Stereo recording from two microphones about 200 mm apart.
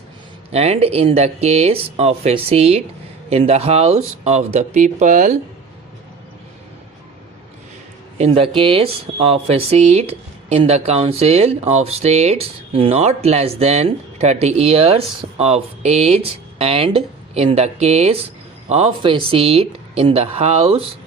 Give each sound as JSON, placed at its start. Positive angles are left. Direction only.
{"t": 0.5, "sound": "speech", "side_deg": -30}
{"t": 8.2, "sound": "speech", "side_deg": -30}